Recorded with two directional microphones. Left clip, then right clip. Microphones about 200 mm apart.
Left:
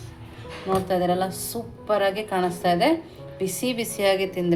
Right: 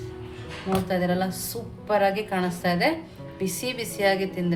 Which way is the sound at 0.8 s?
15° left (ahead or behind).